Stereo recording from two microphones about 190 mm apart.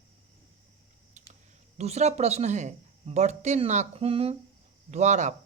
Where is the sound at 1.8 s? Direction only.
35° right (ahead or behind).